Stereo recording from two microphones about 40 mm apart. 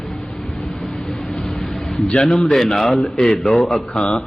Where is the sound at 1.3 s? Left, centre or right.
Left.